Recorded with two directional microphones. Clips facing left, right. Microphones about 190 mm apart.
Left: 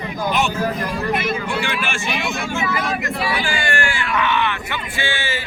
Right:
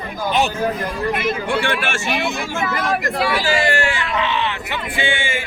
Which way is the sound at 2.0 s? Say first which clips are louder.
Right 4 dB; 55° right (ahead or behind).